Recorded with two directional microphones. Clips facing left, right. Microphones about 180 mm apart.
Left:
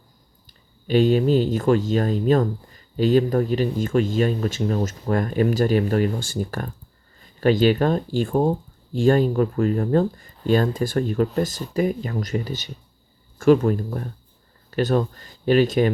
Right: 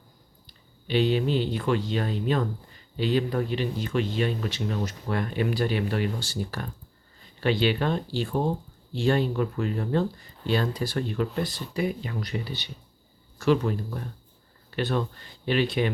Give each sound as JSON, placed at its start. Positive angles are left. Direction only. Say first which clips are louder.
{"t": 0.4, "sound": "speech", "louder": "left 7 dB", "side_deg": 45}